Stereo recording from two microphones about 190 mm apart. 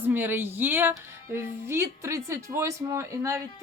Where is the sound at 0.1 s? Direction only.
10° right (ahead or behind).